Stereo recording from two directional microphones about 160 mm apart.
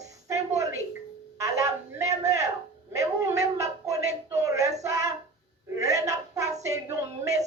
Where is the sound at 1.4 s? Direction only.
20° right (ahead or behind).